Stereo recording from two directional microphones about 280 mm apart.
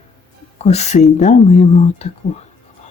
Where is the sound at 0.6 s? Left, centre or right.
Left.